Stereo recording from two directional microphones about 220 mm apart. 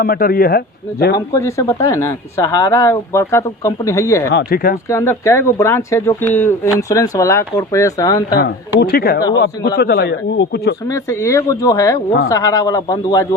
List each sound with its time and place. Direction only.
0.0 s a man's voice: 40° left (ahead or behind)
1.1 s speech: 15° left (ahead or behind)
4.3 s a man's voice: 45° left (ahead or behind)
4.9 s speech: 15° left (ahead or behind)
8.4 s a man's voice: 45° left (ahead or behind)
10.8 s speech: 15° left (ahead or behind)